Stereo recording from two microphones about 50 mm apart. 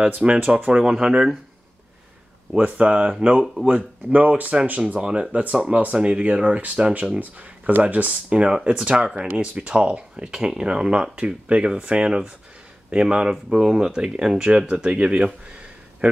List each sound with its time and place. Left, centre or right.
0.0 s speech: right
0.9 s speech: centre
2.6 s speech: right